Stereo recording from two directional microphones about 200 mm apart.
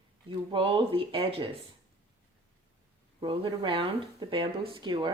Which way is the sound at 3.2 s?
25° right (ahead or behind).